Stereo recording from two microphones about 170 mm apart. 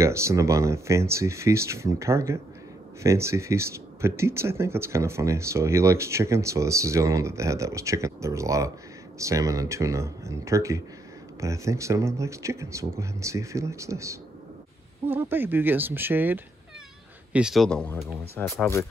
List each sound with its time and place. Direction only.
0.0 s a man's voice: 15° right (ahead or behind); by 18.5 s 10° left (ahead or behind)